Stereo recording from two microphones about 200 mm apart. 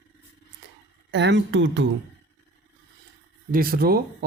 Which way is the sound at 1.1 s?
60° right (ahead or behind).